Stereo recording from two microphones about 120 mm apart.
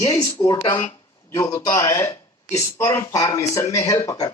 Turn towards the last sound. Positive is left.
turn(degrees=30)  # may be behind; listen again after turning